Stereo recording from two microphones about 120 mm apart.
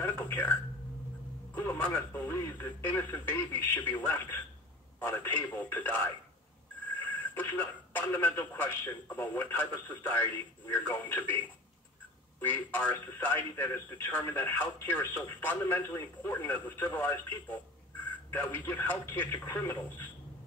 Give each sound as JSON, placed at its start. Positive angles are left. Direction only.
{"t": 0.0, "sound": "a sound", "side_deg": 15}
{"t": 1.5, "sound": "speech", "side_deg": 20}
{"t": 7.3, "sound": "speech", "side_deg": 15}
{"t": 12.4, "sound": "speech", "side_deg": 15}
{"t": 18.3, "sound": "speech", "side_deg": 15}